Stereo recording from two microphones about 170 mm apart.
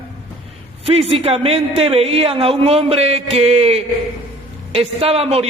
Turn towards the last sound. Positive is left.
turn(degrees=-35)  # may be behind; listen again after turning